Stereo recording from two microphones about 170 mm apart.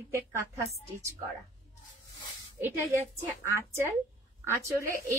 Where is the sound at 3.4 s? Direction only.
15° right (ahead or behind).